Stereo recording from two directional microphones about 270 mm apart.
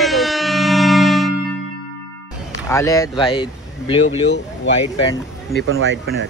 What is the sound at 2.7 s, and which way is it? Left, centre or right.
Speech, centre.